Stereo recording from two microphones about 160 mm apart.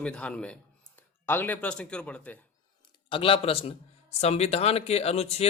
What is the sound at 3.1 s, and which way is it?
Speech, 35° left (ahead or behind).